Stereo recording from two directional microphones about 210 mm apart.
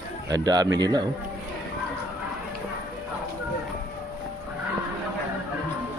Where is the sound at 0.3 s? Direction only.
20° right (ahead or behind).